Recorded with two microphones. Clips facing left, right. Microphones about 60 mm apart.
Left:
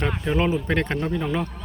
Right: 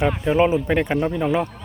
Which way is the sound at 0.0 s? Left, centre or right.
Centre.